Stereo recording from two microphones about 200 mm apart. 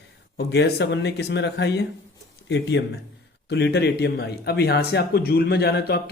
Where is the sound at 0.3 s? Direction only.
60° left (ahead or behind).